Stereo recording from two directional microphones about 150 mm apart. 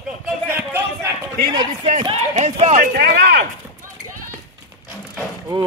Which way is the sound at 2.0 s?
40° right (ahead or behind).